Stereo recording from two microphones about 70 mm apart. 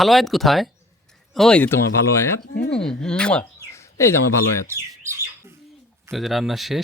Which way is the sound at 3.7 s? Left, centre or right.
Left.